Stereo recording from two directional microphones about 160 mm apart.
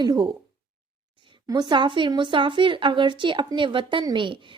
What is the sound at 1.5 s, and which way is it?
A woman's voice, 25° right (ahead or behind).